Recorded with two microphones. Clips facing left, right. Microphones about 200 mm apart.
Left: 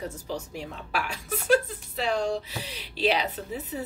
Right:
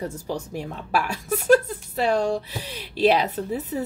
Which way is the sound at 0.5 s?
45° right (ahead or behind).